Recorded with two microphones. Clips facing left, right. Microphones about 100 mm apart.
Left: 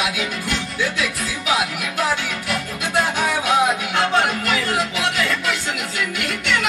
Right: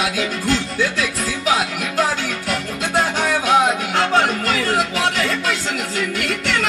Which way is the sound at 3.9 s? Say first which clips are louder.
Right 2 dB; 35° right (ahead or behind).